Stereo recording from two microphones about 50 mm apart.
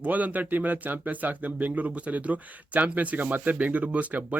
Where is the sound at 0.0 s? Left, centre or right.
Right.